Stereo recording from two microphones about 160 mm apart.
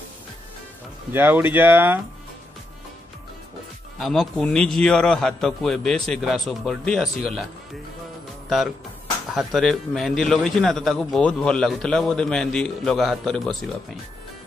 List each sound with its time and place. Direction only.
1.1 s speech: 15° right (ahead or behind)
4.0 s a man's voice: centre (ahead or behind)
8.5 s a man's voice: centre (ahead or behind)